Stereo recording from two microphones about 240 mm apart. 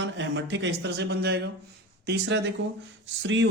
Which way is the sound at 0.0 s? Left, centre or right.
Right.